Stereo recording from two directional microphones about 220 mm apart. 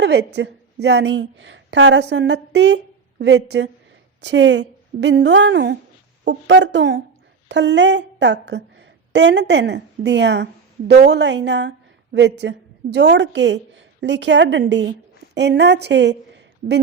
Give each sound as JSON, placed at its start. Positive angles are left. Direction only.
{"t": 0.0, "sound": "a woman's voice", "side_deg": -50}